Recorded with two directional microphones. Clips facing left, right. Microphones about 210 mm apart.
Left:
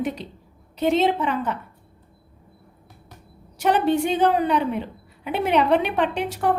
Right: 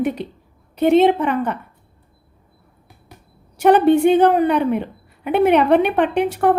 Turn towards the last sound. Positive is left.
turn(degrees=-55)  # may be behind; listen again after turning